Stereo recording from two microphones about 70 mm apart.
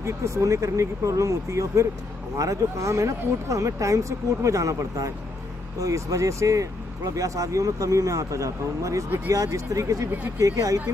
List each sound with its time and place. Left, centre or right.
0.0 s speech: right